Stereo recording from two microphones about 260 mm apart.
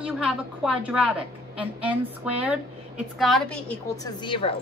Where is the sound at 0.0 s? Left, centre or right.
Centre.